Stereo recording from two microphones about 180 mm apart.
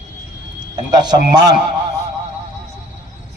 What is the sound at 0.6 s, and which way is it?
Speech, 25° right (ahead or behind).